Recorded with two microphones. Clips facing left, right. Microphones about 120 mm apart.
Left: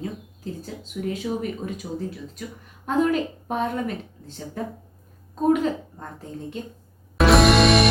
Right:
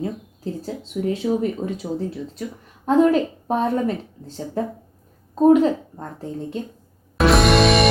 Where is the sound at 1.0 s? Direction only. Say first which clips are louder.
Right 6 dB; 30° right (ahead or behind).